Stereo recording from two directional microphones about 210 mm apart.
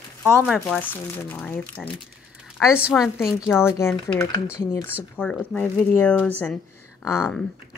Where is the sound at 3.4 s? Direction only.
10° left (ahead or behind).